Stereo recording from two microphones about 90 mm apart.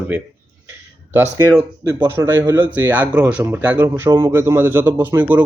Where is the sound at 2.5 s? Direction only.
20° right (ahead or behind).